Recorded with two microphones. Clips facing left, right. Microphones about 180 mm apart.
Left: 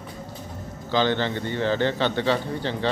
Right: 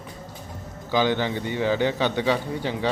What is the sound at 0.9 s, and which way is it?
A man's voice, 10° right (ahead or behind).